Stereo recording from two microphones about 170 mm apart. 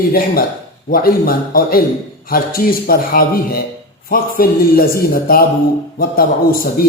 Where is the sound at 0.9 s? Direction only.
60° left (ahead or behind).